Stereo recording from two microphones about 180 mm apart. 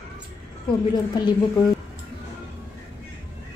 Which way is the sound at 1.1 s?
25° left (ahead or behind).